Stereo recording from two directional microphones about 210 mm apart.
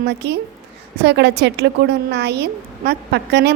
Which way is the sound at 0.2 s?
50° right (ahead or behind).